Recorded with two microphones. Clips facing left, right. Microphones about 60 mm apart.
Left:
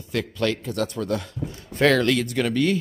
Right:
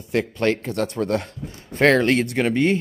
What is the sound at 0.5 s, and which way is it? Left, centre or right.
Speech, right.